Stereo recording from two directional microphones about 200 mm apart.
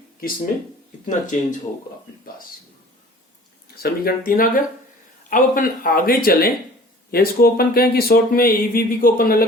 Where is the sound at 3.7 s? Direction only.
50° left (ahead or behind).